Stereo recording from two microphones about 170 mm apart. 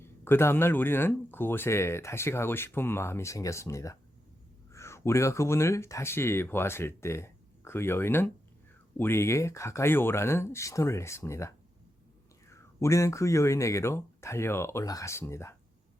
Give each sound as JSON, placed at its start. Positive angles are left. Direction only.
{"t": 0.0, "sound": "speech", "side_deg": 15}